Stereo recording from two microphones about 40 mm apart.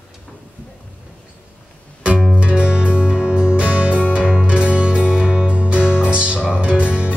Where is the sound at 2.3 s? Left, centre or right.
Right.